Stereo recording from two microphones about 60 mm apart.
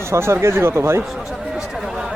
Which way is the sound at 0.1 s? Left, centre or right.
Right.